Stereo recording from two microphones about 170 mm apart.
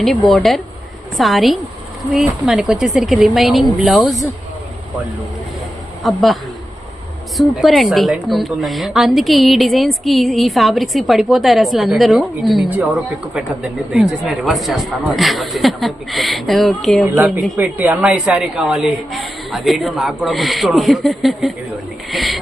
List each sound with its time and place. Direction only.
0.0 s a woman's voice: centre (ahead or behind)
6.0 s a woman's voice: centre (ahead or behind)
17.6 s a woman's voice: 10° right (ahead or behind)